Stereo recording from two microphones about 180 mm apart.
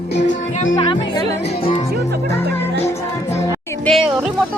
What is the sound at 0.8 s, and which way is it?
Music, 25° left (ahead or behind).